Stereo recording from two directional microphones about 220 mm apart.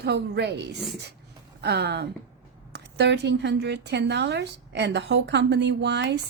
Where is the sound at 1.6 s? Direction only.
50° right (ahead or behind).